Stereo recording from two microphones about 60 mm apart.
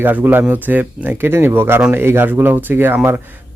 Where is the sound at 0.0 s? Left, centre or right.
Right.